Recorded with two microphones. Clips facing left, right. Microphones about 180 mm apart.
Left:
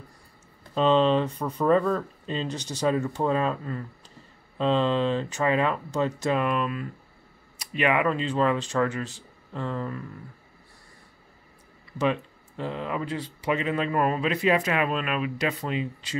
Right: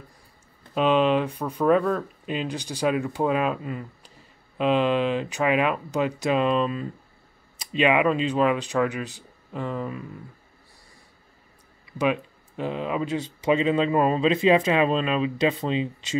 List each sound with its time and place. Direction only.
0.7 s speech: 10° right (ahead or behind)
12.0 s speech: 15° right (ahead or behind)